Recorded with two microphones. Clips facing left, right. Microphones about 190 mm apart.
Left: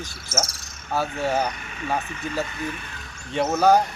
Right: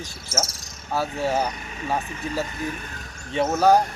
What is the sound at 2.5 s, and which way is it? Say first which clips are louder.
Speech: right 1 dB; 40° right (ahead or behind).